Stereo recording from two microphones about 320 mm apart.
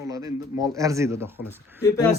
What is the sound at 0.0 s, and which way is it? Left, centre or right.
A man's voice, centre.